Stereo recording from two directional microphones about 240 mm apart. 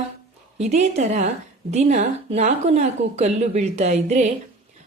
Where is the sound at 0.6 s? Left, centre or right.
Right.